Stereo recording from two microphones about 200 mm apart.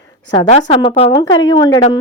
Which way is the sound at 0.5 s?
30° left (ahead or behind).